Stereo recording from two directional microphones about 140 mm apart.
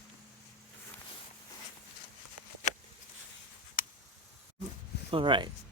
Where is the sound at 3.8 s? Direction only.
80° left.